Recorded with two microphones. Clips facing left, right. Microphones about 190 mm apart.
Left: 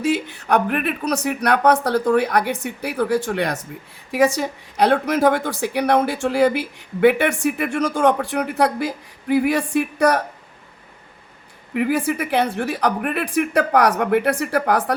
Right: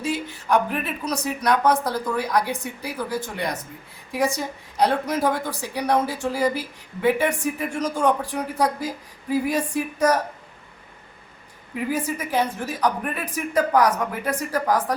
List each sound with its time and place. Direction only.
0.0 s a woman's voice: 65° left (ahead or behind)
11.7 s a woman's voice: 70° left (ahead or behind)